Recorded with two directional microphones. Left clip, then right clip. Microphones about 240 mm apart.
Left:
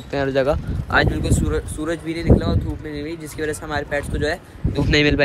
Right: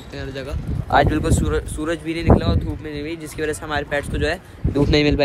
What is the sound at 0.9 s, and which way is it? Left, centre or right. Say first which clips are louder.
Speech: right 2 dB; right.